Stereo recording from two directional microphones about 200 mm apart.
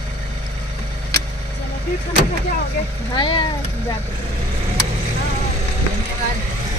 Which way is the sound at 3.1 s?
25° left (ahead or behind).